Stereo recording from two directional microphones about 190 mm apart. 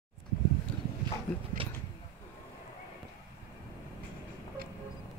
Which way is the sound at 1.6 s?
30° right (ahead or behind).